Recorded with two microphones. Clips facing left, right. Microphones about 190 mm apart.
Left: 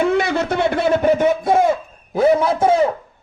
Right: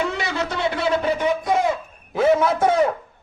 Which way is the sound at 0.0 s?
55° left (ahead or behind).